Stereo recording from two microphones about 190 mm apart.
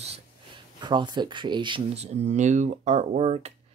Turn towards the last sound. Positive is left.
turn(degrees=-35)  # may be behind; listen again after turning